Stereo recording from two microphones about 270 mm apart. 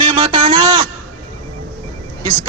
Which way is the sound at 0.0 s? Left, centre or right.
Centre.